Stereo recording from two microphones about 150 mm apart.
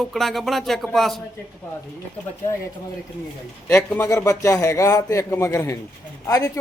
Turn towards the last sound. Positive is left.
turn(degrees=20)  # may be behind; listen again after turning